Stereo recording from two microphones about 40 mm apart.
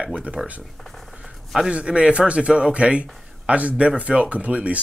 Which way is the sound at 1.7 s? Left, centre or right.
Right.